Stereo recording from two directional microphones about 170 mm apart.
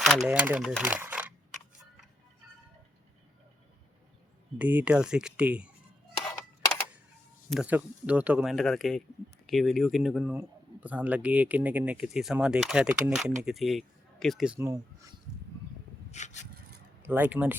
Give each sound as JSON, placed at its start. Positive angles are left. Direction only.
{"t": 0.0, "sound": "speech", "side_deg": 0}
{"t": 0.9, "sound": "a sound", "side_deg": -10}
{"t": 4.5, "sound": "speech", "side_deg": -10}
{"t": 7.5, "sound": "speech", "side_deg": -5}
{"t": 16.1, "sound": "wood", "side_deg": 45}
{"t": 17.0, "sound": "speech", "side_deg": -10}